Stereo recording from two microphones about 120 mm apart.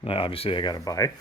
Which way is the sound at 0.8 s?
30° left (ahead or behind).